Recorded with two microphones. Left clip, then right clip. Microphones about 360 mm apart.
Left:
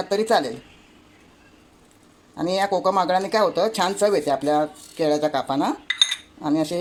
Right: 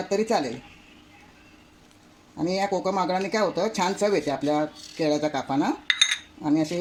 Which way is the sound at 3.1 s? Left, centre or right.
Left.